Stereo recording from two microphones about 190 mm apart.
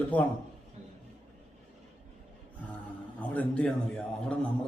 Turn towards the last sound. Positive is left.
turn(degrees=5)  # may be behind; listen again after turning